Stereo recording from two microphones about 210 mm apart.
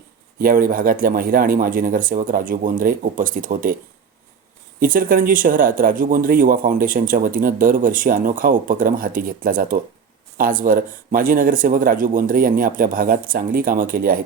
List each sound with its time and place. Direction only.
0.3 s speech: 45° right (ahead or behind)
4.8 s speech: 40° right (ahead or behind)